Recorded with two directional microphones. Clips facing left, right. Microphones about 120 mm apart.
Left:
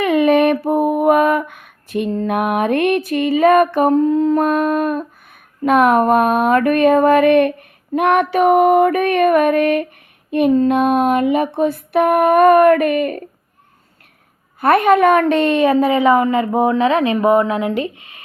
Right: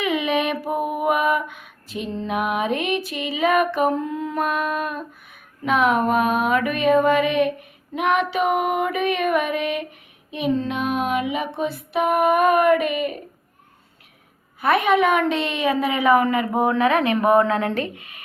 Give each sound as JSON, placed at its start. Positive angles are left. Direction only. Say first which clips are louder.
{"t": 0.0, "sound": "female singing", "louder": "left 9 dB", "side_deg": 50}
{"t": 7.9, "sound": "a sound", "louder": "left 6 dB", "side_deg": 55}
{"t": 14.6, "sound": "a woman's voice", "louder": "left 6 dB", "side_deg": 50}